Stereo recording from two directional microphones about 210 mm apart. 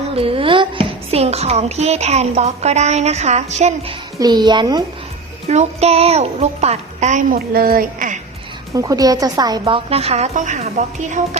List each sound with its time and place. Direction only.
0.1 s a child's voice: 25° right (ahead or behind)
4.2 s a woman's voice: 20° right (ahead or behind)
5.5 s a child's voice: 30° right (ahead or behind)
8.7 s a woman's voice: 15° right (ahead or behind); by 11.2 s 35° right (ahead or behind)